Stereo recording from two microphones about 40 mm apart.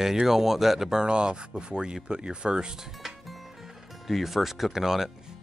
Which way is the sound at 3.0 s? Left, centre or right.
Centre.